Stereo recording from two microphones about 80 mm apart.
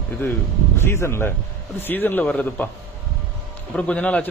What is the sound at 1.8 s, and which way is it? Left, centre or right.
Speech, left.